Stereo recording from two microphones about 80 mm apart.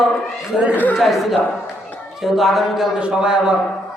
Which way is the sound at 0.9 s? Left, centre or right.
Centre.